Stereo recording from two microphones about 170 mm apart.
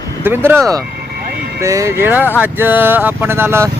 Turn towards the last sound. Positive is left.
turn(degrees=-15)  # may be behind; listen again after turning